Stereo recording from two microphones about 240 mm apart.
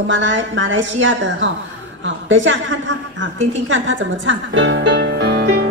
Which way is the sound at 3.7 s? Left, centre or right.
Right.